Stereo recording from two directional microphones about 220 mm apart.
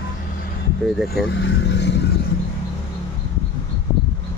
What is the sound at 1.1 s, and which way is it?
Speech, 50° left (ahead or behind).